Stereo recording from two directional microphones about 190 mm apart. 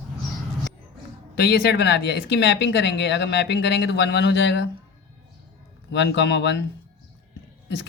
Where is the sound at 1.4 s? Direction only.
60° left (ahead or behind).